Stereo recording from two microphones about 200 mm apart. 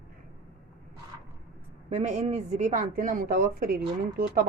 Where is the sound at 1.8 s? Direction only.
35° right (ahead or behind).